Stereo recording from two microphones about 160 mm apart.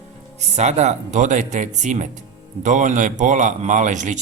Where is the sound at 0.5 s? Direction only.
45° right (ahead or behind).